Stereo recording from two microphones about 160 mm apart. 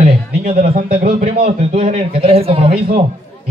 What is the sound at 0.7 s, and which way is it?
A man's voice, 60° right (ahead or behind).